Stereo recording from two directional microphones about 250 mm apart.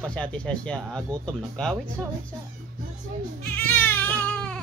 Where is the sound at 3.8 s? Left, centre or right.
Centre.